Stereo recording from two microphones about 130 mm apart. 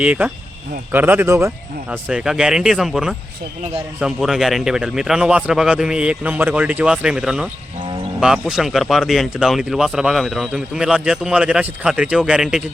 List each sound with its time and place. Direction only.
0.0 s speech: 10° right (ahead or behind)
2.0 s speech: 5° right (ahead or behind)